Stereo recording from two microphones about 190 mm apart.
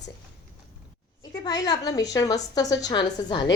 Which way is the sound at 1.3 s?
20° left (ahead or behind).